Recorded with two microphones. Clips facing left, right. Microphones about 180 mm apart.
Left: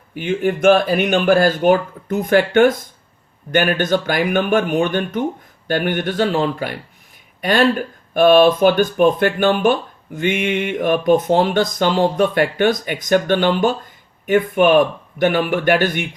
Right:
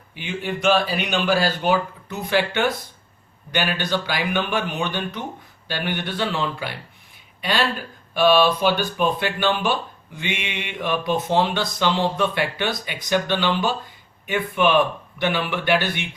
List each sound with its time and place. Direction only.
0.1 s speech: 45° left (ahead or behind)